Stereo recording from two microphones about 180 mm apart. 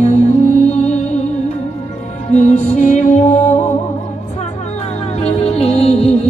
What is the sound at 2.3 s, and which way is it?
Music, 40° left (ahead or behind).